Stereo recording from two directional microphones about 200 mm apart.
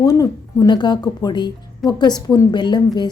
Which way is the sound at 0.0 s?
20° left (ahead or behind).